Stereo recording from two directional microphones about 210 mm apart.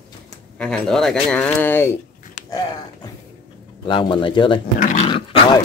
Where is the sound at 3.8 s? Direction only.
25° left (ahead or behind).